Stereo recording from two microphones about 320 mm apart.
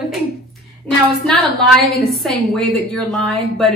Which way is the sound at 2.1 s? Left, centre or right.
Centre.